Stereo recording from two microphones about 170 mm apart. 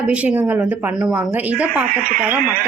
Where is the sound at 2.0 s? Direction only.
55° right (ahead or behind).